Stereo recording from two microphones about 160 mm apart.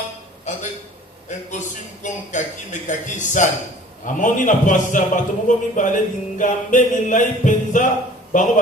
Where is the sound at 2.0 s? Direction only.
50° left (ahead or behind).